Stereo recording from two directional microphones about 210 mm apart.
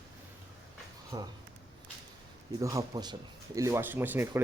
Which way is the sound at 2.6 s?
15° right (ahead or behind).